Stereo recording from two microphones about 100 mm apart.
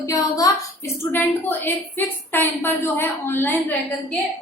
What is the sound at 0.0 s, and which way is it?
A woman's voice, 35° left (ahead or behind).